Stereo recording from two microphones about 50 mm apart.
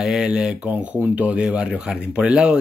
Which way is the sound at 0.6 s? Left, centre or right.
Right.